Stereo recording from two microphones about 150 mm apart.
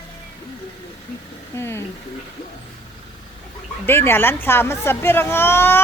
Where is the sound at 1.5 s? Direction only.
15° left (ahead or behind).